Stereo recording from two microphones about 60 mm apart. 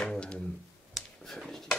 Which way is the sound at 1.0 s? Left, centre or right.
Centre.